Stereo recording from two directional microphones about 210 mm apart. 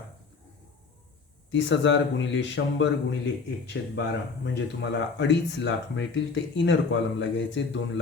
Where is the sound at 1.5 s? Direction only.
60° left (ahead or behind).